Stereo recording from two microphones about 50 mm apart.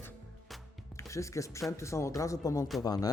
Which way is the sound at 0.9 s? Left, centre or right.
Left.